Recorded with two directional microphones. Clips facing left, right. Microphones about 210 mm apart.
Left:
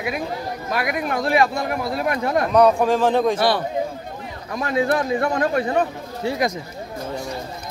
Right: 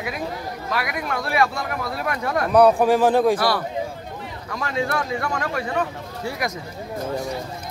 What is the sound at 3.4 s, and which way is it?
Speech, 25° left (ahead or behind).